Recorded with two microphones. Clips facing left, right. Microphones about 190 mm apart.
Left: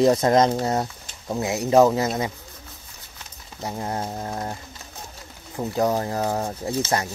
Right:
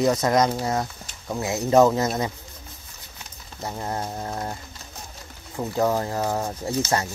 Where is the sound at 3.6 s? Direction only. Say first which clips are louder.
Left 1 dB; 15° left (ahead or behind).